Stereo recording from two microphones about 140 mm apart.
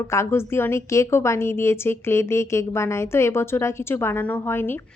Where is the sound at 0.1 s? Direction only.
20° left (ahead or behind).